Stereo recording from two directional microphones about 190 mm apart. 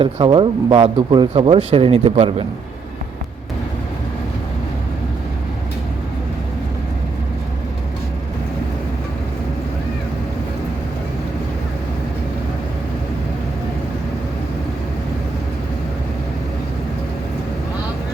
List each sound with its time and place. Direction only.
0.0 s speech: 30° right (ahead or behind)